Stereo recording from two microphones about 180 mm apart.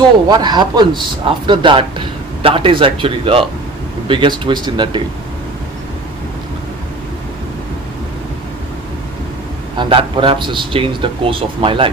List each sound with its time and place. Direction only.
0.3 s a man's voice: 25° right (ahead or behind)
9.7 s a man's voice: 30° right (ahead or behind)